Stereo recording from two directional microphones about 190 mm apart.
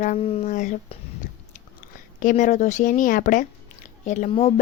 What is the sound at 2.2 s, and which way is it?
A woman's voice, 40° left (ahead or behind).